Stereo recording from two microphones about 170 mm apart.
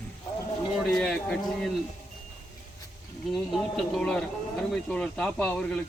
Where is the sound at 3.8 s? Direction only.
5° left (ahead or behind).